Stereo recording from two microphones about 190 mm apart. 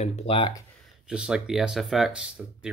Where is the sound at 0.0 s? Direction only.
35° left (ahead or behind).